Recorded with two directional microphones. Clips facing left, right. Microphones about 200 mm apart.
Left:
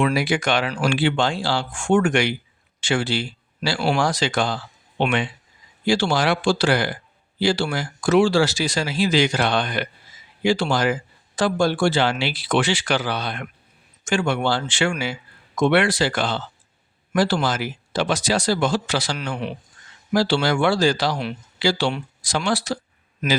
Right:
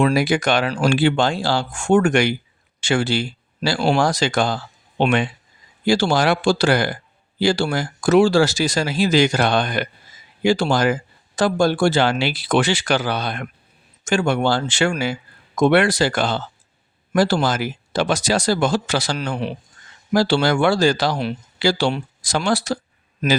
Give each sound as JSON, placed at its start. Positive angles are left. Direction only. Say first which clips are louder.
{"t": 0.0, "sound": "speech", "louder": "right 3 dB", "side_deg": -40}
{"t": 20.1, "sound": "speech", "louder": "right 2 dB", "side_deg": -45}